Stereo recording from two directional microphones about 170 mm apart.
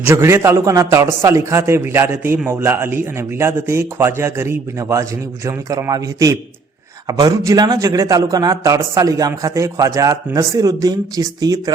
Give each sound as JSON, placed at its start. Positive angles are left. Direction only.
{"t": 0.0, "sound": "a man's voice", "side_deg": -15}